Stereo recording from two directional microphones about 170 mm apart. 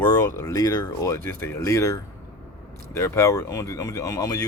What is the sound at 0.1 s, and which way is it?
Speech, 20° left (ahead or behind).